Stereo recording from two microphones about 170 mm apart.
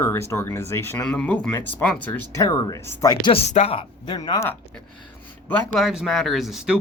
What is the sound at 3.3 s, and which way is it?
Speech, 40° left (ahead or behind).